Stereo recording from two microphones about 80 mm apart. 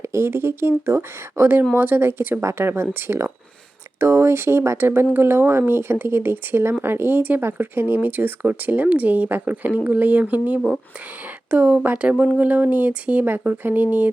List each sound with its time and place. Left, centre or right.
0.0 s speech: right